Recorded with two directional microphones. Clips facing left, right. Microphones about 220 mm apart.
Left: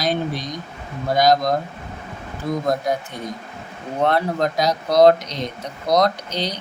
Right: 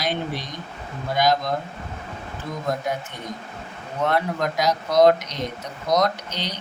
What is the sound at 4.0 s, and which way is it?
Speech, 35° left (ahead or behind).